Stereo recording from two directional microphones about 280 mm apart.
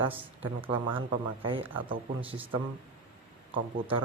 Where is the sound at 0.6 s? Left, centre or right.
Centre.